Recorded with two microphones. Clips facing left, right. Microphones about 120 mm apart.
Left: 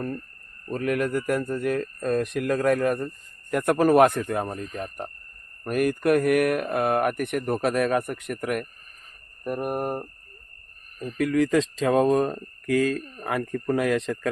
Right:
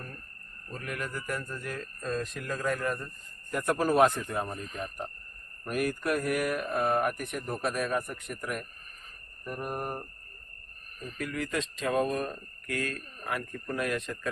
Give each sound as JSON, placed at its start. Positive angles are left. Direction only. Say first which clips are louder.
{"t": 0.7, "sound": "a man's voice", "louder": "left 12 dB", "side_deg": 85}
{"t": 3.5, "sound": "speech", "louder": "left 7 dB", "side_deg": 60}
{"t": 11.2, "sound": "speech", "louder": "left 12 dB", "side_deg": 90}